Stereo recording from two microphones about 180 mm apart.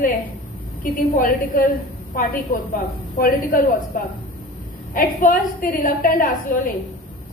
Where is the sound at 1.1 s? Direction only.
50° left (ahead or behind).